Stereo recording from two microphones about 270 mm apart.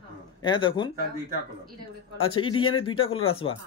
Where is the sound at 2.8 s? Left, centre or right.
Centre.